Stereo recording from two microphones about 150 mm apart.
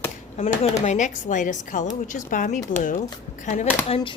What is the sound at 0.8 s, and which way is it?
A woman's voice, 55° left (ahead or behind).